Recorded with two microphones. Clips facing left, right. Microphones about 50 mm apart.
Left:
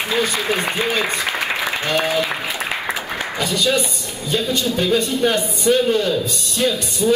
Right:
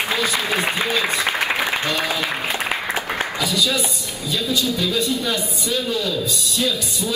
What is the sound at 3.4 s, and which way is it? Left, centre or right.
A man's voice, left.